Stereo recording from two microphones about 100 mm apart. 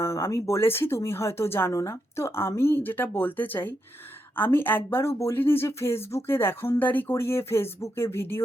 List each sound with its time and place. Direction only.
0.0 s speech: 25° left (ahead or behind)